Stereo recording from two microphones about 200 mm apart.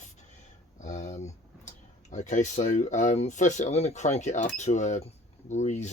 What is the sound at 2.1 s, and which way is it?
Speech, 40° left (ahead or behind).